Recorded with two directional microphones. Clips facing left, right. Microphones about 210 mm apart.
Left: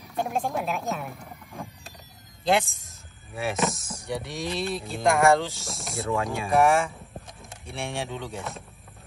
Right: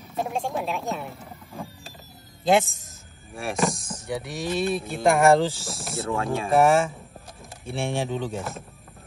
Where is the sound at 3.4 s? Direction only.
Centre (ahead or behind).